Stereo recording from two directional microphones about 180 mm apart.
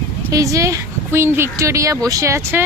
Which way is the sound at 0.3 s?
15° right (ahead or behind).